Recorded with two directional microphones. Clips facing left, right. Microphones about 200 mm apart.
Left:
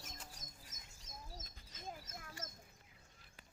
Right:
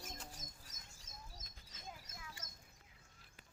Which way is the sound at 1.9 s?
50° left (ahead or behind).